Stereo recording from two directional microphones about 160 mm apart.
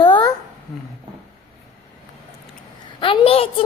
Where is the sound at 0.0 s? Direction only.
30° left (ahead or behind).